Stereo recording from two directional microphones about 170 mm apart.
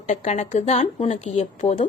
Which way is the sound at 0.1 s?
40° left (ahead or behind).